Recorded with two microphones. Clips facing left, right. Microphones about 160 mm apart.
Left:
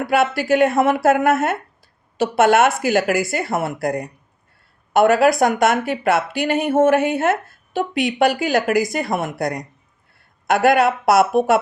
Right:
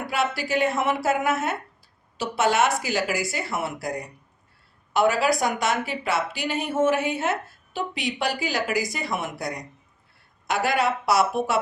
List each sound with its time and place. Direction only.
0.1 s speech: 55° left (ahead or behind)